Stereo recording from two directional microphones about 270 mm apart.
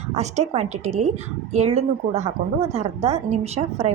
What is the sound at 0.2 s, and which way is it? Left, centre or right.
A woman's voice, right.